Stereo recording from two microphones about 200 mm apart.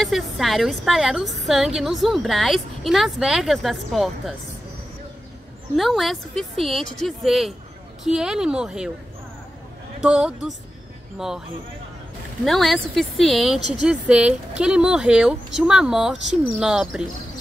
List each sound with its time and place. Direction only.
0.0 s a woman's voice: centre (ahead or behind)
5.8 s a woman's voice: centre (ahead or behind)
9.9 s a woman's voice: 5° right (ahead or behind)
12.4 s a woman's voice: centre (ahead or behind)